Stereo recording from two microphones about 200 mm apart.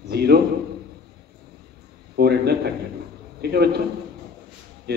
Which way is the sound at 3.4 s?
55° right (ahead or behind).